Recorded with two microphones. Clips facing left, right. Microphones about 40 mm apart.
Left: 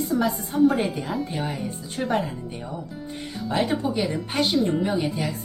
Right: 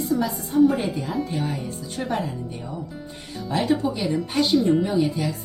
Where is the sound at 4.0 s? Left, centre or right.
Centre.